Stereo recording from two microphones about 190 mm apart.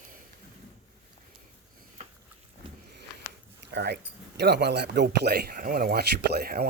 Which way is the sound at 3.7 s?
65° right (ahead or behind).